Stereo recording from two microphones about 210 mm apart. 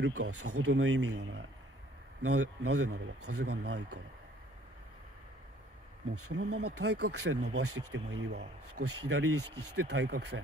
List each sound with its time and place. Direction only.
0.0 s speech: 90° right; by 1.4 s 60° right (ahead or behind)
2.2 s speech: 90° right
6.1 s speech: 90° right; by 8.5 s 55° right (ahead or behind)
8.7 s speech: 90° right
9.8 s speech: 55° right (ahead or behind)